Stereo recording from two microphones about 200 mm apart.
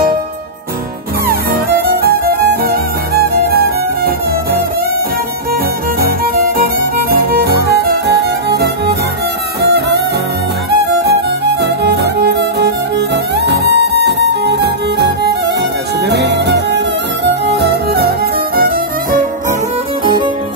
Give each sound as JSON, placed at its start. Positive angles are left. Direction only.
{"t": 1.2, "sound": "music", "side_deg": -50}
{"t": 11.6, "sound": "music", "side_deg": -55}